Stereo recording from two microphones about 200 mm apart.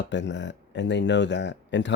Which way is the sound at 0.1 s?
65° left (ahead or behind).